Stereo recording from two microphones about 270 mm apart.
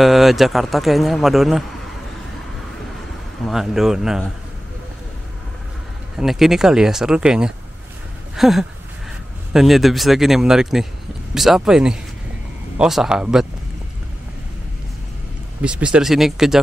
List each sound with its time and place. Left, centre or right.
0.0 s speech: centre
3.4 s speech: centre
6.1 s speech: centre
15.6 s speech: centre